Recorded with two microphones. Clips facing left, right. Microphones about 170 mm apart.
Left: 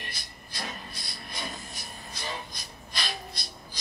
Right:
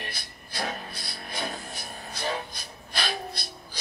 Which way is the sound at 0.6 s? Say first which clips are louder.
Right 6 dB; 55° right (ahead or behind).